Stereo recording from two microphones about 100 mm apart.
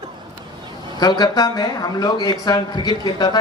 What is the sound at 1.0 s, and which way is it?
Speech, 45° left (ahead or behind).